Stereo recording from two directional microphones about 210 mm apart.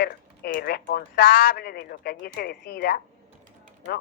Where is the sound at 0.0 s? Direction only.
45° left (ahead or behind).